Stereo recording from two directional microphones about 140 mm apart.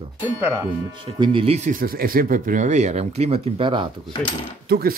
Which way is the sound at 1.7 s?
90° right.